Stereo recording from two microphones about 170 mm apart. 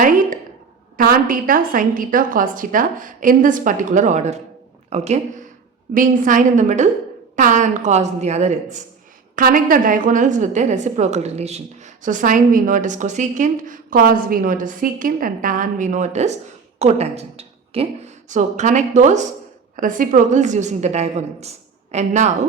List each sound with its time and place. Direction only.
0.0 s a woman's voice: 50° right (ahead or behind)
5.9 s a woman's voice: 55° right (ahead or behind)
9.3 s a woman's voice: 55° right (ahead or behind)